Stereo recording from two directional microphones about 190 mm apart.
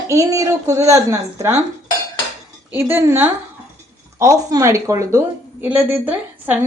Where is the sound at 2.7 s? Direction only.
10° right (ahead or behind).